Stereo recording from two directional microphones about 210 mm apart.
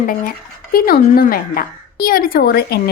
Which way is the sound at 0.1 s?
45° left (ahead or behind).